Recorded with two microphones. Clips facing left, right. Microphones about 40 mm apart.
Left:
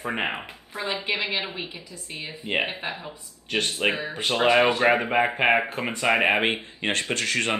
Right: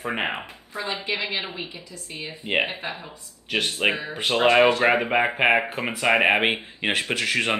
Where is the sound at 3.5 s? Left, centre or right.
Centre.